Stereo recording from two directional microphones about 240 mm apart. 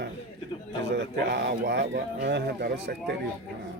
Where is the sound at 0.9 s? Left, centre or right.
Right.